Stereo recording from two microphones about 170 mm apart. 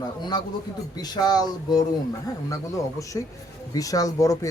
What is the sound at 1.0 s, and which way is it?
Speech, 25° left (ahead or behind).